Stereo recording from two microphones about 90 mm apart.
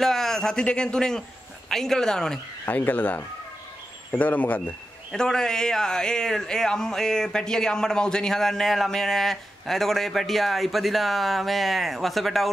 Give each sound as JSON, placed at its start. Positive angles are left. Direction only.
{"t": 0.0, "sound": "a man's voice", "side_deg": 5}
{"t": 2.6, "sound": "a man's voice", "side_deg": 20}